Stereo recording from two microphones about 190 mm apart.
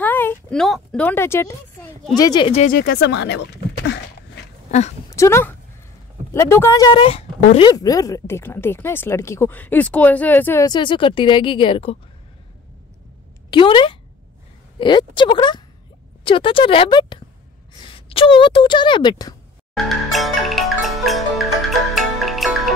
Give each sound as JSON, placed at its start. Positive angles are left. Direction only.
{"t": 0.0, "sound": "speech", "side_deg": 10}
{"t": 2.5, "sound": "speech", "side_deg": 40}
{"t": 2.8, "sound": "speech", "side_deg": 55}
{"t": 4.6, "sound": "speech", "side_deg": 35}
{"t": 5.1, "sound": "speech", "side_deg": 15}
{"t": 13.5, "sound": "speech", "side_deg": 25}
{"t": 19.8, "sound": "music", "side_deg": 0}